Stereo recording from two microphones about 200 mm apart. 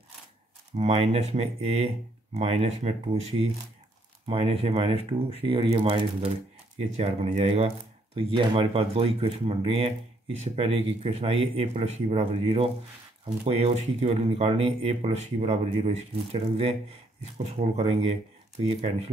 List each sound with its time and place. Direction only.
0.7 s speech: 30° right (ahead or behind)
17.7 s speech: 30° right (ahead or behind)